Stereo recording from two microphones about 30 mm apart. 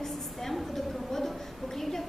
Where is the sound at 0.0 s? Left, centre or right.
Centre.